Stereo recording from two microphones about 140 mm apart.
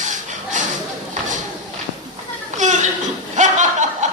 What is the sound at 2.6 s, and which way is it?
Chuckle, 60° right (ahead or behind).